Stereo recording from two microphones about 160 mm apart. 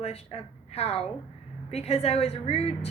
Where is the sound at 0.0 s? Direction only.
40° left (ahead or behind).